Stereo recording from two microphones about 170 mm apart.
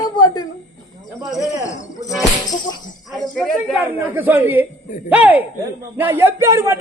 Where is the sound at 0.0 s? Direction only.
25° left (ahead or behind).